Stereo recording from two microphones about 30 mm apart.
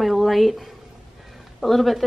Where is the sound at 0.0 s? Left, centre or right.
Centre.